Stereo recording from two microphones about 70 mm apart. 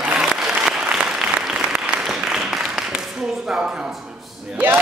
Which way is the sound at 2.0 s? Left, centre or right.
Centre.